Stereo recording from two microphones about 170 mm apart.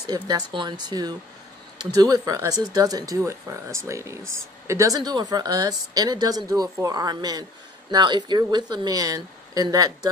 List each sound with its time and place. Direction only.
0.0 s a woman's voice: 25° right (ahead or behind)